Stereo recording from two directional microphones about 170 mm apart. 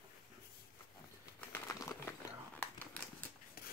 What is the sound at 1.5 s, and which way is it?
Crumpling, 15° left (ahead or behind).